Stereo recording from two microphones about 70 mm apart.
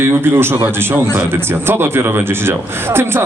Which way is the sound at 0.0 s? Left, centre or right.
Right.